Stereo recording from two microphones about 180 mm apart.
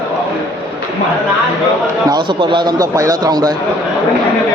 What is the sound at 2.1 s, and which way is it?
A man's voice, 25° right (ahead or behind).